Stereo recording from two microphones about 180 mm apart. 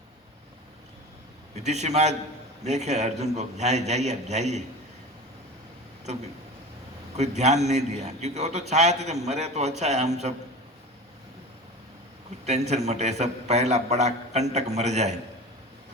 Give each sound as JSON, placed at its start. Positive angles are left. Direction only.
{"t": 1.5, "sound": "a man's voice", "side_deg": -40}
{"t": 7.2, "sound": "a man's voice", "side_deg": -40}
{"t": 12.5, "sound": "a man's voice", "side_deg": -35}